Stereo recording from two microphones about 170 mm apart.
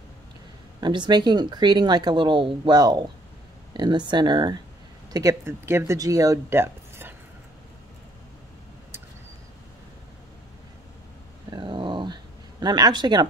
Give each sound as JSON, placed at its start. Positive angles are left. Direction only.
{"t": 0.7, "sound": "speech", "side_deg": -25}
{"t": 11.5, "sound": "dog", "side_deg": -30}